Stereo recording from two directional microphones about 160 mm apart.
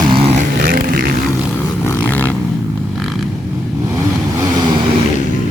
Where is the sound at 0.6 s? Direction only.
65° right (ahead or behind).